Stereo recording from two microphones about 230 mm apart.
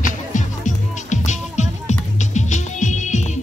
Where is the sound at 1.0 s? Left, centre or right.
Left.